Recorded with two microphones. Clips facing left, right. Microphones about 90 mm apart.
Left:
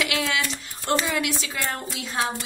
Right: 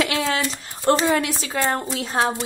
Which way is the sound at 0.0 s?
35° right (ahead or behind).